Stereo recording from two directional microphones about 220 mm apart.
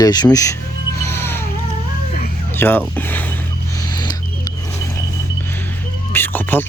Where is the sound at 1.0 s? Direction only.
10° left (ahead or behind).